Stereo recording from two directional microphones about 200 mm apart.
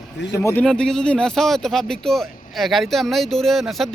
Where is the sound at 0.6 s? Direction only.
Centre (ahead or behind).